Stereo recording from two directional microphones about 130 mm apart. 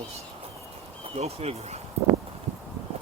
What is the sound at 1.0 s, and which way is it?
Speech, 50° right (ahead or behind).